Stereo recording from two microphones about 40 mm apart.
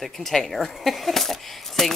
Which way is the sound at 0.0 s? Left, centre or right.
Centre.